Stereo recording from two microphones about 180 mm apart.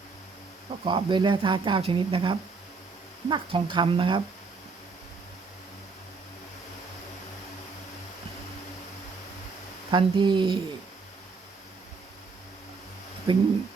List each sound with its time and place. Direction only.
0.9 s speech: 25° right (ahead or behind)
9.9 s speech: 25° right (ahead or behind)
13.3 s speech: 30° right (ahead or behind)